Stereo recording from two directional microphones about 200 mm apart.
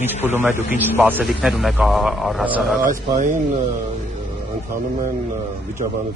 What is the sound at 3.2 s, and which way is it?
Speech, 40° right (ahead or behind).